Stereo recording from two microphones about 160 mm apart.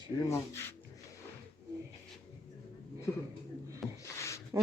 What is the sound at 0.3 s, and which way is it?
Speech, 15° left (ahead or behind).